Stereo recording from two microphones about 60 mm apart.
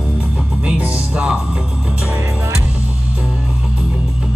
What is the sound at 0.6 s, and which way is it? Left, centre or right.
Music, centre.